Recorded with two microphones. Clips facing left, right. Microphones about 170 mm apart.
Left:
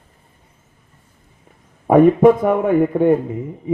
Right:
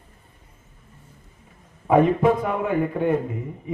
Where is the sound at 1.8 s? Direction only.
50° left (ahead or behind).